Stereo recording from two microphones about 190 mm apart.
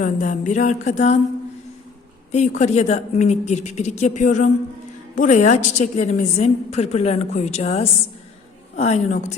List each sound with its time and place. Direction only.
0.0 s a woman's voice: 40° left (ahead or behind)
2.3 s a woman's voice: 40° left (ahead or behind)